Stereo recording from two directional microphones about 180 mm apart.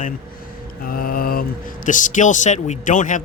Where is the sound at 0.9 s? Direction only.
55° left (ahead or behind).